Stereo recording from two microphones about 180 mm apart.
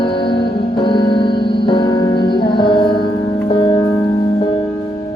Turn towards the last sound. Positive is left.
turn(degrees=25)  # may be behind; listen again after turning